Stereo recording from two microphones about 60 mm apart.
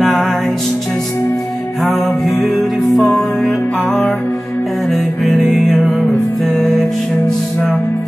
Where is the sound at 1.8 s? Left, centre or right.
Centre.